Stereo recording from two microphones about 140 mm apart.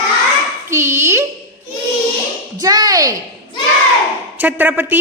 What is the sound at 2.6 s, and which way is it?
Speech, 25° right (ahead or behind).